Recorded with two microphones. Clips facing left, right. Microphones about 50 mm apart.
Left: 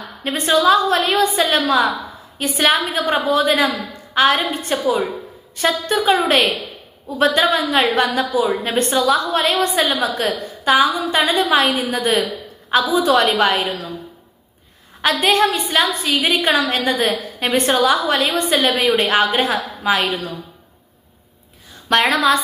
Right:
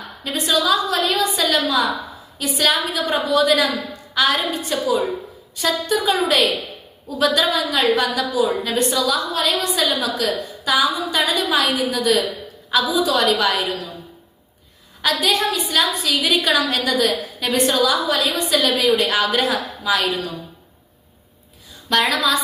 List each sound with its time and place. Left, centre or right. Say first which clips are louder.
0.3 s a woman's voice: left 4 dB; left
15.0 s a woman's voice: left 4 dB; left
21.8 s a woman's voice: left 3 dB; left